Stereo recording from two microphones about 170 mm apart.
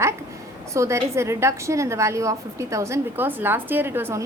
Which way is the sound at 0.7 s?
15° right (ahead or behind).